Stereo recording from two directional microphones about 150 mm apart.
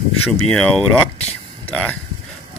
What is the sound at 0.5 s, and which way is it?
Speech, 5° left (ahead or behind).